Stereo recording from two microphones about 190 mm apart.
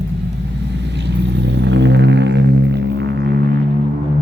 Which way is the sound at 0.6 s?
65° right (ahead or behind).